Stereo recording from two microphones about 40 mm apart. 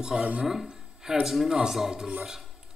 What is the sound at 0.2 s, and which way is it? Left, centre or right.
Speech, right.